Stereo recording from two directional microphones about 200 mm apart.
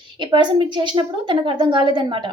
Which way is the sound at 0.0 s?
25° right (ahead or behind).